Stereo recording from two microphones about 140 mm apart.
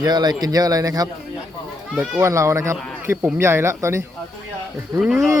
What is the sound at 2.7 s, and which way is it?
Speech, 5° left (ahead or behind).